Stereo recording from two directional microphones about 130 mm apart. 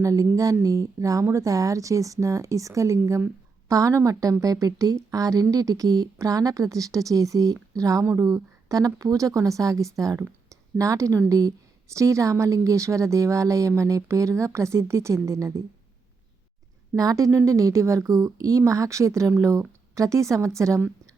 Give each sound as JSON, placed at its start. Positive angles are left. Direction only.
{"t": 0.0, "sound": "a woman's voice", "side_deg": -25}
{"t": 16.9, "sound": "a woman's voice", "side_deg": -25}